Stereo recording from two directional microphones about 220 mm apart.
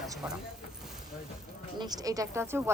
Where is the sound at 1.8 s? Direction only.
20° right (ahead or behind).